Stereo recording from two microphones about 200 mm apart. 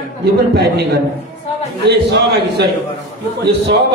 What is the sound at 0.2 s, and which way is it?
Speech, 55° right (ahead or behind).